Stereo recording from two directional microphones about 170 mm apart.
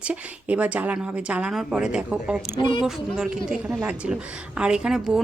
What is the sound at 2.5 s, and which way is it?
Speech, 25° left (ahead or behind).